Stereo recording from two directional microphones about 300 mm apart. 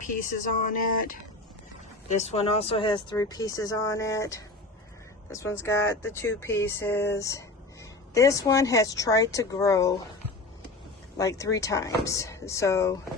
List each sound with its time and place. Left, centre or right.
0.2 s speech: left
5.5 s speech: centre
11.2 s speech: centre